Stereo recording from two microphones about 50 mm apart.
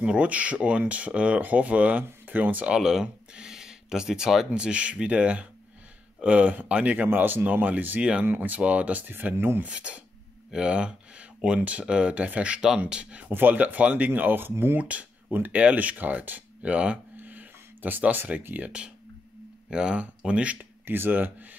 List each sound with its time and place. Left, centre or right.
0.0 s speech: right
2.7 s speech: centre
4.5 s speech: right
7.1 s speech: right
8.0 s speech: right
8.3 s speech: right
9.7 s speech: right
13.3 s speech: right
14.8 s speech: right
17.2 s a sound: right
19.7 s speech: centre
20.8 s speech: right